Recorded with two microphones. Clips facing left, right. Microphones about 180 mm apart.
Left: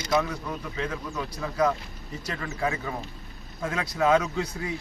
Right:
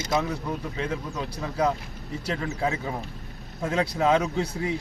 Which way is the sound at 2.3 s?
25° right (ahead or behind).